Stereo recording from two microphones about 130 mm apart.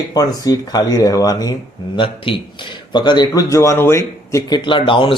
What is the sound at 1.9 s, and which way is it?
Speech, 40° left (ahead or behind).